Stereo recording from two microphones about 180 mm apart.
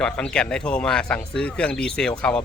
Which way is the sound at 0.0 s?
5° left (ahead or behind).